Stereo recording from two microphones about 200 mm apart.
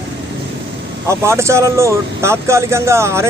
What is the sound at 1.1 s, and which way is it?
Speech, 15° right (ahead or behind).